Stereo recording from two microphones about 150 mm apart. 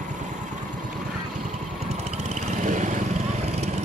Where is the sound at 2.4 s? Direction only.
55° right (ahead or behind).